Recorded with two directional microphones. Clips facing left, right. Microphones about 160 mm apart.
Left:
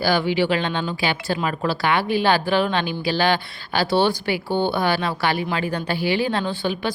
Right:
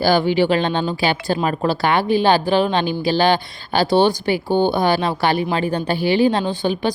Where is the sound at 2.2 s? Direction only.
20° right (ahead or behind).